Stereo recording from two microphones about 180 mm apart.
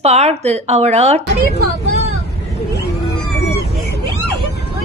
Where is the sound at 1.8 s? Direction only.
40° right (ahead or behind).